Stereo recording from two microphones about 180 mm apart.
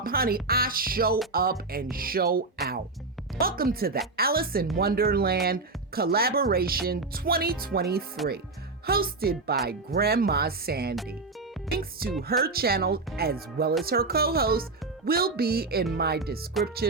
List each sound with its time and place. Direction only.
0.0 s speech: 55° right (ahead or behind)
3.4 s speech: 55° right (ahead or behind)